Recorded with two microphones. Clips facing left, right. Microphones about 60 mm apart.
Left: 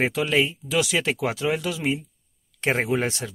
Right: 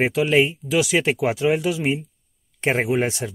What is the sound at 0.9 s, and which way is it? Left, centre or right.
Speech, centre.